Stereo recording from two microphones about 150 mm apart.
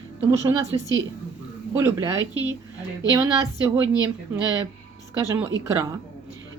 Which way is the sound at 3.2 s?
20° right (ahead or behind).